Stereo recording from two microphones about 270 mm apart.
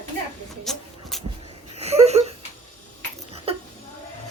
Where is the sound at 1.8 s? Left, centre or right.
Right.